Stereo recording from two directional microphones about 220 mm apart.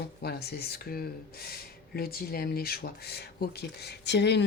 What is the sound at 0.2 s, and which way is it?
Speech, 45° left (ahead or behind).